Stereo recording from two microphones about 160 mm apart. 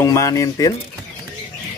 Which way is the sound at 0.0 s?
20° left (ahead or behind).